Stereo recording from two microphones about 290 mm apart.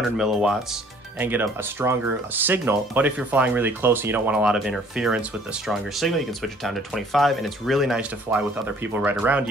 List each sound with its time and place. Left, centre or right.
0.2 s speech: centre